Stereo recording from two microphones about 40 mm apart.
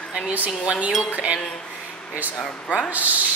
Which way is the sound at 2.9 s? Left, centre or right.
Right.